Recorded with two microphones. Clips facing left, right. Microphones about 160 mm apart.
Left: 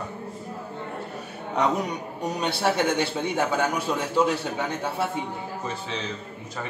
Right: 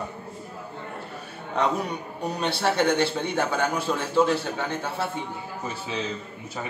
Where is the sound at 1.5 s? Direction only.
20° left (ahead or behind).